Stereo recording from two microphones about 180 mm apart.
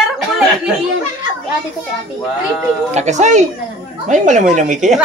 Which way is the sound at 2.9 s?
40° right (ahead or behind).